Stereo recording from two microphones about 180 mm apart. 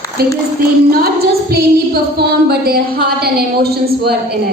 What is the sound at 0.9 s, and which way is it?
Music, 55° right (ahead or behind).